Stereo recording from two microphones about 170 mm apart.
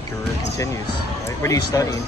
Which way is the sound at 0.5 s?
20° left (ahead or behind).